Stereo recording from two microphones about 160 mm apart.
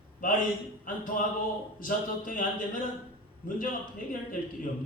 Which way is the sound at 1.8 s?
55° left (ahead or behind).